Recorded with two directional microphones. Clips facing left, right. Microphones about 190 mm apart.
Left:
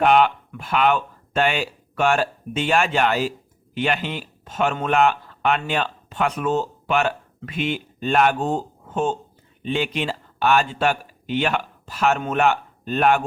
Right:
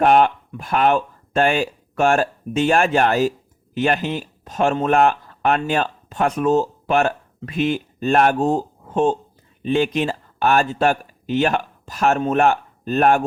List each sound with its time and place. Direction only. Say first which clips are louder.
0.0 s speech: right 2 dB; 45° right (ahead or behind)